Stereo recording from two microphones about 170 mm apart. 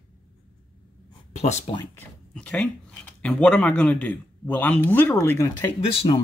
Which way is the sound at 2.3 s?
5° left (ahead or behind).